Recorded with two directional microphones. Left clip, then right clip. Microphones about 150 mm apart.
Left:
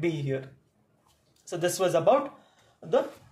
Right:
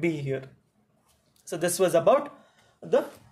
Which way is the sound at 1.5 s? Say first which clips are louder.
Right 2 dB; 40° right (ahead or behind).